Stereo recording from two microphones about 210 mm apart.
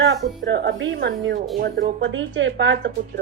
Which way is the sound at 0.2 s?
55° right (ahead or behind).